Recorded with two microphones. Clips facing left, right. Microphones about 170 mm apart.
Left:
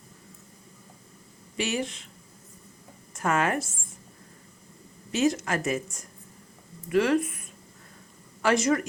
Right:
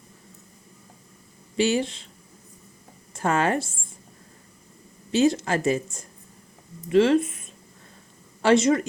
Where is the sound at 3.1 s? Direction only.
30° right (ahead or behind).